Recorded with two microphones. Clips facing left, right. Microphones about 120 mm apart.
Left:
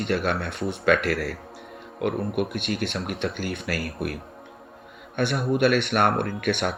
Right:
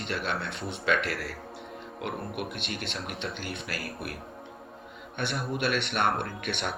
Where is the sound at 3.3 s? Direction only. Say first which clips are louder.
Left 7 dB; 50° left (ahead or behind).